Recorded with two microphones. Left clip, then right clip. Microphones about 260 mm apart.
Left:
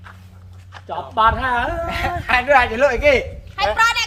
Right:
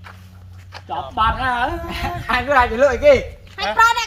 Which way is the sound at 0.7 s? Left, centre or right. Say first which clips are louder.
Right 2 dB; right.